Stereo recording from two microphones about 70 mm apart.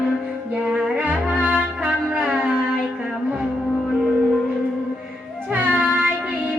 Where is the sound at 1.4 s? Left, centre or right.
Right.